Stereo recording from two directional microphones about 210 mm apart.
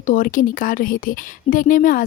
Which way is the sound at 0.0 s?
40° left (ahead or behind).